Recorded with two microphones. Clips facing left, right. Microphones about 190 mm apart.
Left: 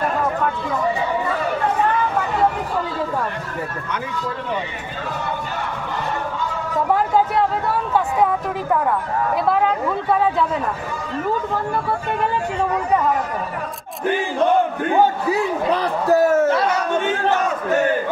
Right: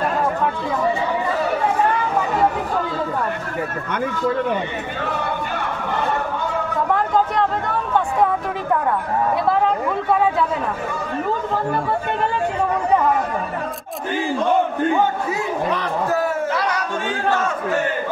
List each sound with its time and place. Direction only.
7.3 s speech: 5° left (ahead or behind)
15.0 s a man's voice: 35° left (ahead or behind)
16.5 s a sound: 25° left (ahead or behind)